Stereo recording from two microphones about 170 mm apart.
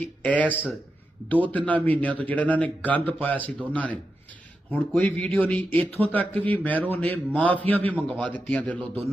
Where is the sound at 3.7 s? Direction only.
10° left (ahead or behind).